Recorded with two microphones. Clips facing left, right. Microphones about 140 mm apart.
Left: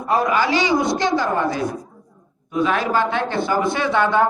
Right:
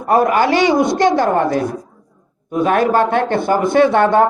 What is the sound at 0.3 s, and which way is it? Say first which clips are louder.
Speech: right 5 dB; 55° right (ahead or behind).